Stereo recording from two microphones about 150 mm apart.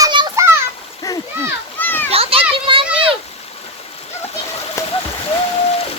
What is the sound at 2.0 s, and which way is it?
Children playing, 40° right (ahead or behind).